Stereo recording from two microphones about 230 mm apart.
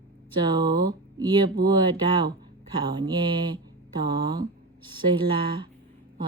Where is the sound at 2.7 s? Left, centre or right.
Centre.